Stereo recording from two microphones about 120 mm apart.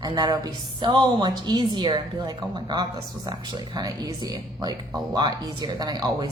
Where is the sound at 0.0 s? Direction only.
35° right (ahead or behind).